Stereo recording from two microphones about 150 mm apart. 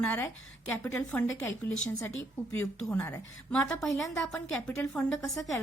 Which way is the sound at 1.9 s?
20° left (ahead or behind).